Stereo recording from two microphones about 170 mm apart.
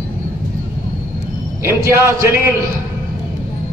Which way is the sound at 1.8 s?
15° right (ahead or behind).